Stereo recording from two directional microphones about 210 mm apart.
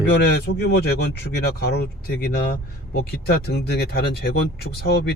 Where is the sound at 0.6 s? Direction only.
50° left (ahead or behind).